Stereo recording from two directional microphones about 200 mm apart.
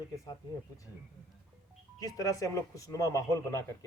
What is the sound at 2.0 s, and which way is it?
Speech, 15° left (ahead or behind).